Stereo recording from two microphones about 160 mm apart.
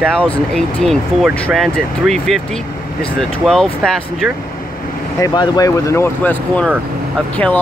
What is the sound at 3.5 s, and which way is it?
Speech, 5° left (ahead or behind).